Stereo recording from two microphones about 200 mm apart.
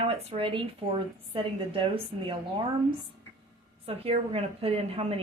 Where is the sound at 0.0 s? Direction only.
30° right (ahead or behind).